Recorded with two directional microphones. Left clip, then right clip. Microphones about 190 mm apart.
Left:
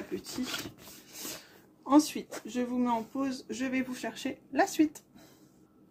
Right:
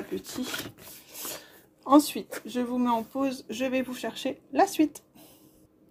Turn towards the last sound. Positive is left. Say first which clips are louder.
# right 3 dB
turn(degrees=-15)  # may be behind; listen again after turning